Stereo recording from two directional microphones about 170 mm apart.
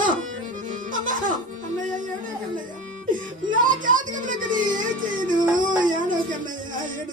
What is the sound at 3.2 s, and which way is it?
Speech, 50° right (ahead or behind).